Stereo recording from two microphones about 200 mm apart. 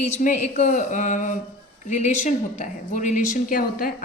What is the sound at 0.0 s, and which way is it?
A woman's voice, 35° left (ahead or behind).